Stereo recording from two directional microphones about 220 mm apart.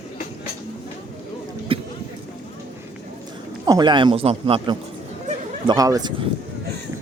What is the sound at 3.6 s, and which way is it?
A man's voice, 20° right (ahead or behind).